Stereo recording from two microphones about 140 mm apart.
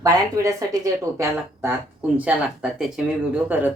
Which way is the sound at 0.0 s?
25° right (ahead or behind).